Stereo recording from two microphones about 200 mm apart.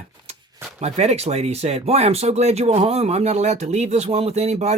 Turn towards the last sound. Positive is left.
turn(degrees=-35)  # may be behind; listen again after turning